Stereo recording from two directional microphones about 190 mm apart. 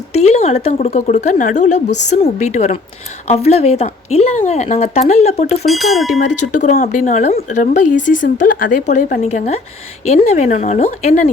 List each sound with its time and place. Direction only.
0.1 s a woman's voice: 35° left (ahead or behind)
5.6 s a sound: centre (ahead or behind)
6.6 s a woman's voice: 40° left (ahead or behind)